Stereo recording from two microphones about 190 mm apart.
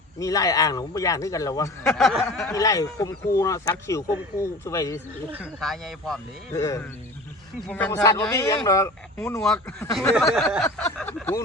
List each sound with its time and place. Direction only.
0.2 s speech: 15° left (ahead or behind)
1.9 s speech: centre (ahead or behind)
2.5 s speech: 15° left (ahead or behind)
5.3 s speech: 5° right (ahead or behind)
6.5 s speech: 15° left (ahead or behind)